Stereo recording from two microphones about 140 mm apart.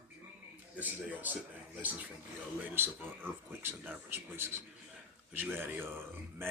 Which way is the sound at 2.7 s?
15° right (ahead or behind).